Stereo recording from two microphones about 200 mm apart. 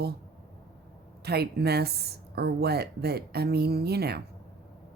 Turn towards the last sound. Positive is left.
turn(degrees=-55)  # may be behind; listen again after turning